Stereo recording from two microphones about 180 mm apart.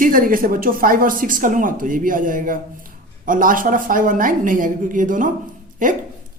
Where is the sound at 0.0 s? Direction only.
50° right (ahead or behind).